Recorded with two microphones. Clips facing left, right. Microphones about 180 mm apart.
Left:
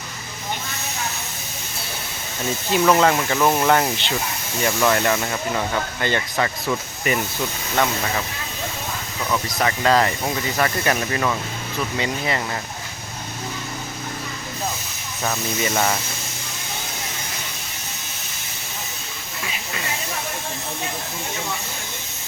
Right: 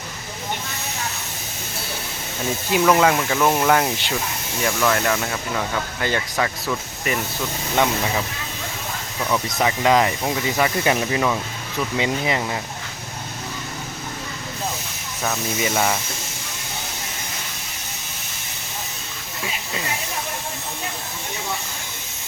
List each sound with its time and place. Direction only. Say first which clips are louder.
2.7 s speech: even; 5° right (ahead or behind)
7.8 s speech: right 1 dB; 15° right (ahead or behind)
9.3 s speech: right 1 dB; 10° right (ahead or behind)
15.2 s speech: even; centre (ahead or behind)